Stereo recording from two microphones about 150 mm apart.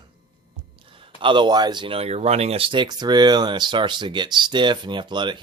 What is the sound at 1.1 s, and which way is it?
Speech, 35° right (ahead or behind).